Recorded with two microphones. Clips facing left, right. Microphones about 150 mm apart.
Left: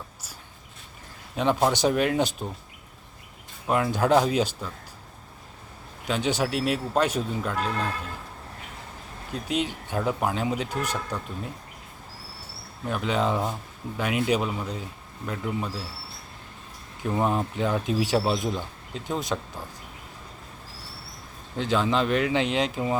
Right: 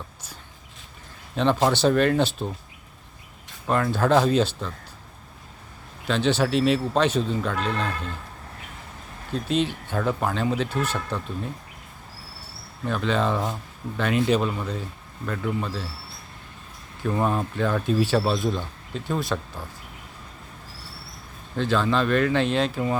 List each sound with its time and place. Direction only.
1.4 s speech: 10° left (ahead or behind)
3.7 s speech: 10° left (ahead or behind)
6.1 s speech: 10° left (ahead or behind)
9.3 s speech: 10° left (ahead or behind)
12.8 s speech: 10° left (ahead or behind)
17.0 s speech: 15° left (ahead or behind)
21.5 s speech: 15° left (ahead or behind)